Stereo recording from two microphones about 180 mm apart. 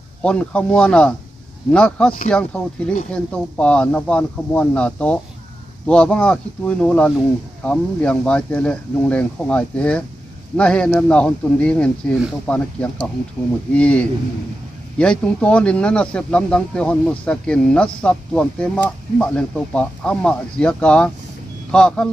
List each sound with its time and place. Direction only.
0.2 s speech: 5° left (ahead or behind)